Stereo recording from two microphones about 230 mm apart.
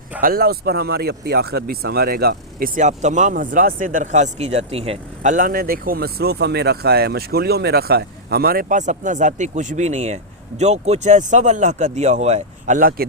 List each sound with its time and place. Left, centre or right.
0.2 s speech: right